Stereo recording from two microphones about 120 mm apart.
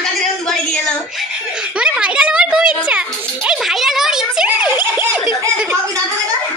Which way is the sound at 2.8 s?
10° right (ahead or behind).